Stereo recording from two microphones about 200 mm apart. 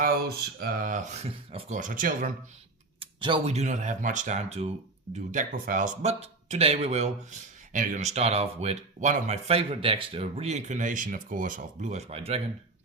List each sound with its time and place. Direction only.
0.0 s speech: 50° right (ahead or behind)
3.0 s speech: 25° right (ahead or behind)